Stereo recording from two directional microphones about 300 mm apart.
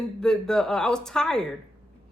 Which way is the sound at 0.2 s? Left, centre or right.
Centre.